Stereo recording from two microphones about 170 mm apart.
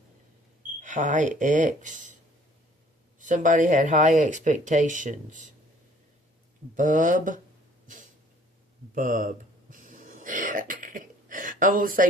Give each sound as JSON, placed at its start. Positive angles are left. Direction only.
{"t": 0.8, "sound": "speech", "side_deg": -45}
{"t": 3.2, "sound": "speech", "side_deg": -50}
{"t": 6.7, "sound": "speech", "side_deg": -50}
{"t": 9.0, "sound": "throat clearing", "side_deg": -50}